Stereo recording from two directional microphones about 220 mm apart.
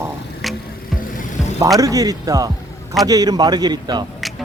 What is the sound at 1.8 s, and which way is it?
A man's voice, 15° right (ahead or behind).